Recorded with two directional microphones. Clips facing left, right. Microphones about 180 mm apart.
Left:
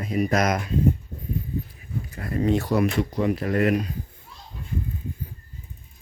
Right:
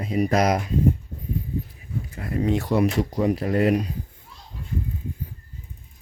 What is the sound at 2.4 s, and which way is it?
Speech, 15° right (ahead or behind).